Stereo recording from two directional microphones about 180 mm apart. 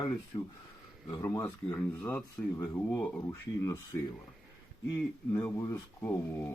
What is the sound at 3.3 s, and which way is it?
Speech, 15° left (ahead or behind).